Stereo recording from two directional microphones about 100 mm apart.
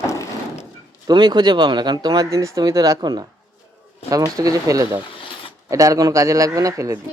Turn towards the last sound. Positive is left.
turn(degrees=-30)  # may be behind; listen again after turning